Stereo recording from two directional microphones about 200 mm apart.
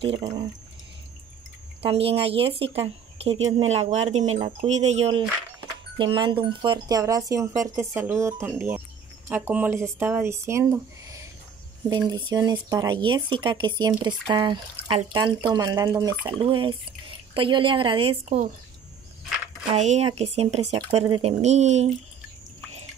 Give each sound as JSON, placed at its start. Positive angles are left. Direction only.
{"t": 0.0, "sound": "speech", "side_deg": -30}
{"t": 1.8, "sound": "speech", "side_deg": -30}
{"t": 19.7, "sound": "speech", "side_deg": -35}